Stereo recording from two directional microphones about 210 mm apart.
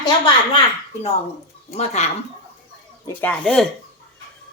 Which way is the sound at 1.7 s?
30° left (ahead or behind).